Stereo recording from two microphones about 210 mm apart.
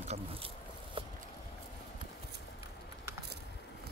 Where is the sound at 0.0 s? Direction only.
30° right (ahead or behind).